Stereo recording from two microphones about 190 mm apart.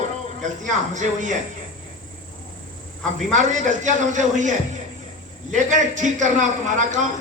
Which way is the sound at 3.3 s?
40° right (ahead or behind).